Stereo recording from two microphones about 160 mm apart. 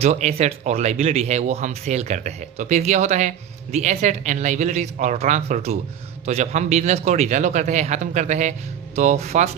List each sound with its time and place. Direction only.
0.0 s speech: 45° right (ahead or behind)